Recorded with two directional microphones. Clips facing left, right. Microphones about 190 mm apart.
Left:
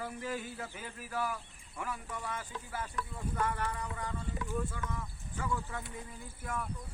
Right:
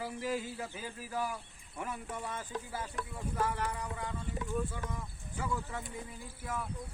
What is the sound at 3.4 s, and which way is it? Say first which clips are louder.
Speech: right 1 dB; 10° right (ahead or behind).